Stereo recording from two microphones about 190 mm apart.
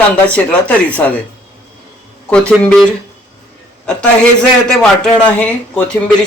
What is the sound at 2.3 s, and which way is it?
Speech, 5° left (ahead or behind).